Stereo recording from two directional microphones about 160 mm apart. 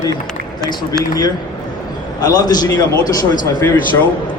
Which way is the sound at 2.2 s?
25° left (ahead or behind).